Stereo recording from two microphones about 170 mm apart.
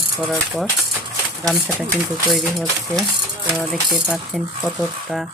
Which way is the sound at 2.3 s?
Centre (ahead or behind).